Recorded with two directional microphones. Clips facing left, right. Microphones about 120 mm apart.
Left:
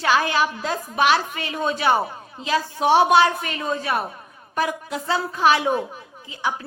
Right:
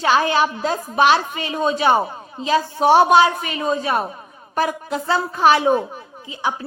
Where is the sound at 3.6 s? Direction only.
25° right (ahead or behind).